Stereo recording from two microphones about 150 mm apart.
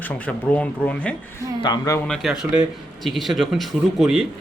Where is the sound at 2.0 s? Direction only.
Centre (ahead or behind).